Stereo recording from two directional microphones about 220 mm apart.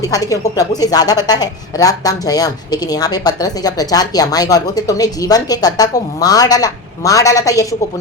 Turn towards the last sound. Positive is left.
turn(degrees=15)  # may be behind; listen again after turning